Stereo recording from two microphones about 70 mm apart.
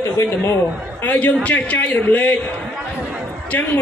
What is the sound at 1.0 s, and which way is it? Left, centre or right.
A woman's voice, left.